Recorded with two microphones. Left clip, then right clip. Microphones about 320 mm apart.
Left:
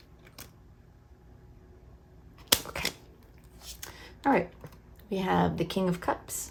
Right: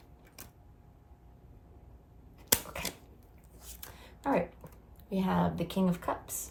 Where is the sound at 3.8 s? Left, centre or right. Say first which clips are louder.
Left 6 dB; left.